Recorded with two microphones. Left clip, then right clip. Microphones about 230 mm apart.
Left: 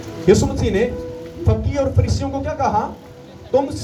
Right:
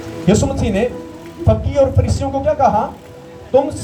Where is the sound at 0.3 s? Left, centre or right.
Left.